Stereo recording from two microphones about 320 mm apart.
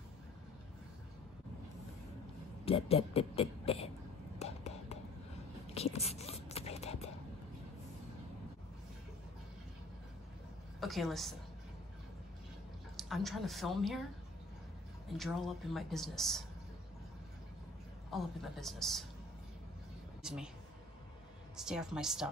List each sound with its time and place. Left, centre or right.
2.6 s speech: centre
4.4 s a sound: centre
10.8 s a woman's voice: centre
12.9 s a woman's voice: centre
15.1 s speech: centre
18.1 s speech: centre
20.2 s a sound: centre
21.5 s speech: centre